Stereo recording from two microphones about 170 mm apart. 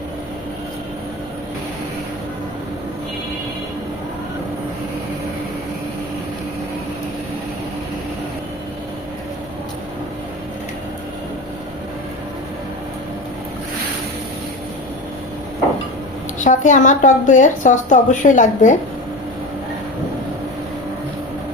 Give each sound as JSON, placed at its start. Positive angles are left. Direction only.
{"t": 16.4, "sound": "a woman's voice", "side_deg": 45}